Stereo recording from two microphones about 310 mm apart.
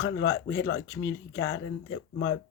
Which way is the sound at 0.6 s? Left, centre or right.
Left.